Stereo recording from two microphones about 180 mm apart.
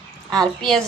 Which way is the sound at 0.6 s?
Centre (ahead or behind).